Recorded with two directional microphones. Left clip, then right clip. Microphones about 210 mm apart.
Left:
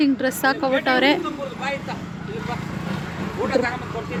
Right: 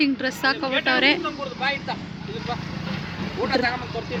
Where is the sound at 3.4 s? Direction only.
25° right (ahead or behind).